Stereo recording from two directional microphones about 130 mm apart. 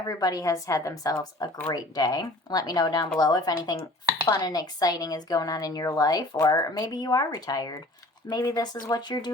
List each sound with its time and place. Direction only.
0.0 s a woman's voice: 30° left (ahead or behind)